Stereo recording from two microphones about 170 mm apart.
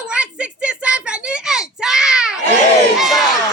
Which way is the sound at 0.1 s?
5° right (ahead or behind).